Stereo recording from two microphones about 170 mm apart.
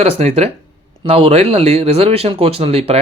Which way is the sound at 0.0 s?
35° right (ahead or behind).